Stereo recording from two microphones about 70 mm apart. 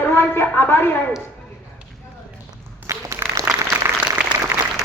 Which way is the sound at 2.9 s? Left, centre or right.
Right.